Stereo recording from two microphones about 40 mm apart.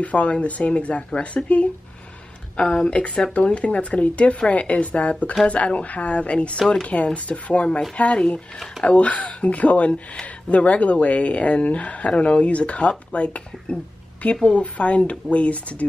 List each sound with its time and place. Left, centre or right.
0.0 s speech: left